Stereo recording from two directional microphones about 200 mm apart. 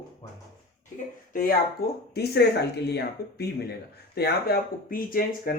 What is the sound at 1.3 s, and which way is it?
Speech, 45° left (ahead or behind).